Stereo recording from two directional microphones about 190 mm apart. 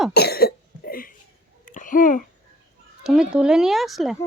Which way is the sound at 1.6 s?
45° left (ahead or behind).